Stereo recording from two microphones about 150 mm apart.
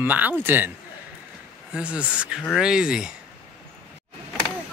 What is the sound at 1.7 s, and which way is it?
Speech, 10° right (ahead or behind).